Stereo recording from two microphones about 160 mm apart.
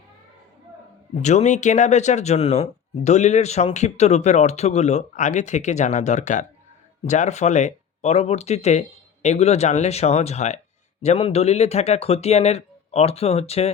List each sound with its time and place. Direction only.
1.1 s speech: 45° left (ahead or behind)